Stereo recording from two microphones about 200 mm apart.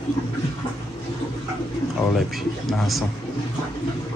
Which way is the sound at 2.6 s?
Centre (ahead or behind).